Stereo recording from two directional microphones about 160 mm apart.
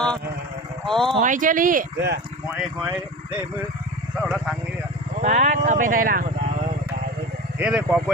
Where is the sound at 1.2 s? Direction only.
55° right (ahead or behind); by 2.2 s 75° right (ahead or behind).